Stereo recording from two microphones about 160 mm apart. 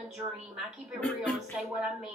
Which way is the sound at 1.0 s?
10° left (ahead or behind).